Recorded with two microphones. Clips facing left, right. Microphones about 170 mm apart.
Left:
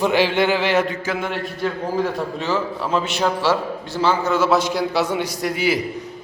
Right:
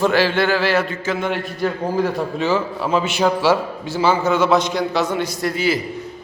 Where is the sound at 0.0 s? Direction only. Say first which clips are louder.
Right 1 dB; 15° left (ahead or behind).